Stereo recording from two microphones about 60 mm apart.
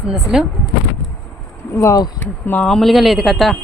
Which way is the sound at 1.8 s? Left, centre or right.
Left.